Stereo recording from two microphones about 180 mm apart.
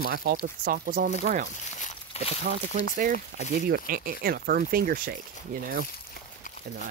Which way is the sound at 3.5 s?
60° right (ahead or behind).